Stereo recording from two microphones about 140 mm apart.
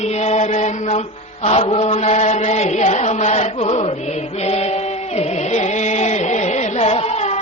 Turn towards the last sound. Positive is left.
turn(degrees=50)  # may be behind; listen again after turning